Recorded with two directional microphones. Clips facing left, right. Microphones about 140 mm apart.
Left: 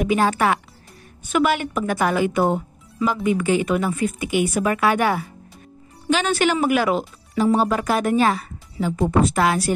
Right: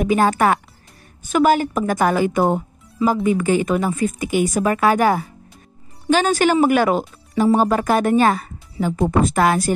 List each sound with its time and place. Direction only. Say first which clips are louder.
0.0 s a woman's voice: right 3 dB; 40° right (ahead or behind)